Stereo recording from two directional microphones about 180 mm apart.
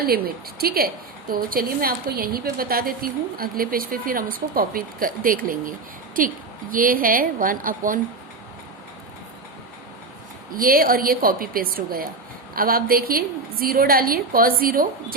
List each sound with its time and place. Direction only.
0.0 s a woman's voice: 55° right (ahead or behind)
10.5 s a woman's voice: 55° right (ahead or behind)